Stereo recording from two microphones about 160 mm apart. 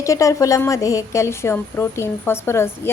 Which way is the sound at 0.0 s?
20° left (ahead or behind).